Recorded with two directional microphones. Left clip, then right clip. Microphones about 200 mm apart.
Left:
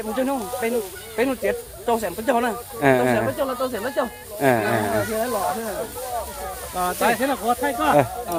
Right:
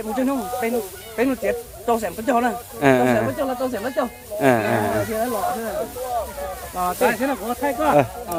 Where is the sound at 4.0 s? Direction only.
25° left (ahead or behind).